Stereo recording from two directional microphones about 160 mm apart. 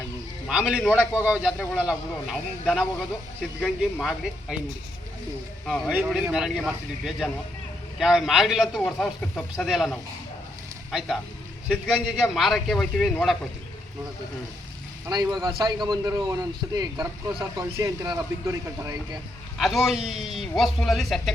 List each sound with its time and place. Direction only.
0.4 s speech: 5° right (ahead or behind)
5.6 s speech: centre (ahead or behind)
11.7 s speech: centre (ahead or behind)
15.1 s a man's voice: 25° right (ahead or behind)
19.5 s speech: centre (ahead or behind)